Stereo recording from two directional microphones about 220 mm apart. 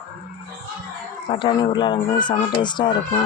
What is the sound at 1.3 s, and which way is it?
Speech, 20° left (ahead or behind).